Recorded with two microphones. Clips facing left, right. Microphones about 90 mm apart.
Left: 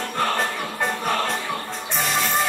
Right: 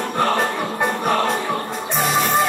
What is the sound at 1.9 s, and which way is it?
Music, centre (ahead or behind).